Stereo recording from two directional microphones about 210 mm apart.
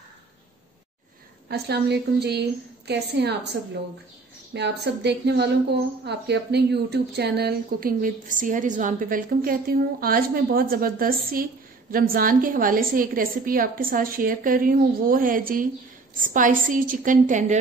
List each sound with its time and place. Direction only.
1.5 s a woman's voice: 50° right (ahead or behind)
4.6 s a woman's voice: 55° right (ahead or behind); by 17.6 s 35° right (ahead or behind)